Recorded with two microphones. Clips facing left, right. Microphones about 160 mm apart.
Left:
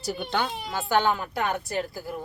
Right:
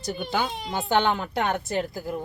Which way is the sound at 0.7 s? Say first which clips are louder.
Right 1 dB; 20° right (ahead or behind).